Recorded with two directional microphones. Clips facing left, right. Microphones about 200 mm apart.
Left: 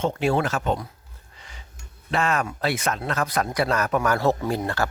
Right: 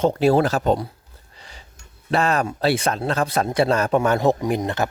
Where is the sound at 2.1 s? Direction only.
35° right (ahead or behind); by 4.8 s 20° right (ahead or behind).